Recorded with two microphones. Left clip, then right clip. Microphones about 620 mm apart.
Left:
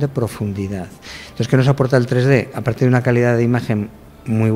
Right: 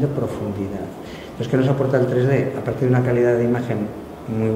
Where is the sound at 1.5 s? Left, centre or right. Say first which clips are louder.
Left 3 dB; left.